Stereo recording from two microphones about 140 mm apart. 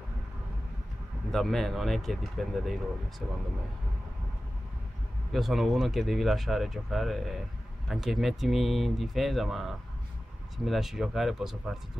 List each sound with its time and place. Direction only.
1.3 s speech: centre (ahead or behind)
5.3 s speech: centre (ahead or behind)